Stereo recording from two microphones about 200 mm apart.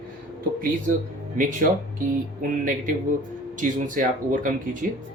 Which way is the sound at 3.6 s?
40° right (ahead or behind).